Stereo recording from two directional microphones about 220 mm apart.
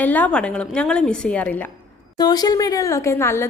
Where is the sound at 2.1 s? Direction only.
20° left (ahead or behind).